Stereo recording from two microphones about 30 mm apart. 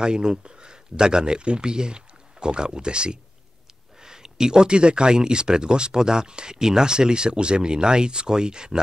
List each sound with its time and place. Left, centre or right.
0.0 s speech: right
4.0 s speech: right